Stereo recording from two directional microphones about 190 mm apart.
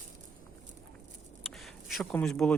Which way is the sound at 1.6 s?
Centre (ahead or behind).